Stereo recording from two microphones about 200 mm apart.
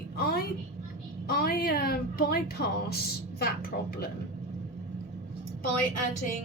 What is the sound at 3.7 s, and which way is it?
Speech, 65° left (ahead or behind).